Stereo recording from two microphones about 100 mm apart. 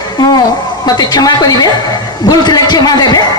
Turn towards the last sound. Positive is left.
turn(degrees=40)  # may be behind; listen again after turning